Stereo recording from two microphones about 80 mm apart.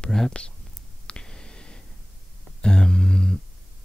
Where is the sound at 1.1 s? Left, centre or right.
Centre.